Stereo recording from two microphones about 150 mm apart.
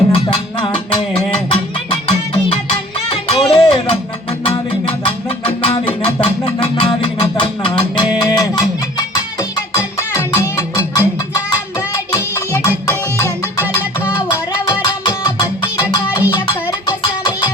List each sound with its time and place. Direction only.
0.1 s music: 35° left (ahead or behind); by 11.0 s 20° left (ahead or behind)
12.1 s music: 15° left (ahead or behind)
14.7 s music: 30° left (ahead or behind)
16.8 s music: 30° left (ahead or behind)